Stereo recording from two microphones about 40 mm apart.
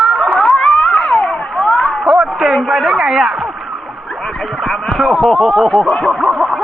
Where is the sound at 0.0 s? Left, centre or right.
Centre.